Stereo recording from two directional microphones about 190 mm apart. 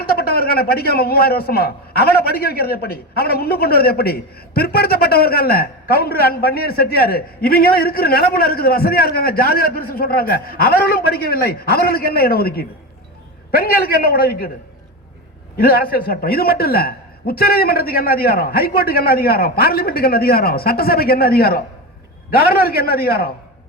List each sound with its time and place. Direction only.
0.0 s a man's voice: 55° left (ahead or behind)
15.5 s a man's voice: 50° left (ahead or behind)